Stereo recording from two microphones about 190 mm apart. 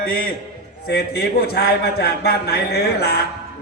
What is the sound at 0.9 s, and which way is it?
A man's voice, 55° left (ahead or behind).